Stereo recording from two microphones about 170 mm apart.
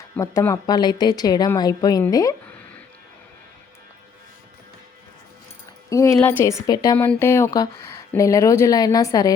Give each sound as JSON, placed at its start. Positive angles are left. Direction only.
{"t": 0.2, "sound": "speech", "side_deg": 20}
{"t": 5.9, "sound": "a woman's voice", "side_deg": 20}